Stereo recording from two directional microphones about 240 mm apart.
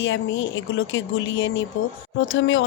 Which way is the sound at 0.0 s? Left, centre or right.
Left.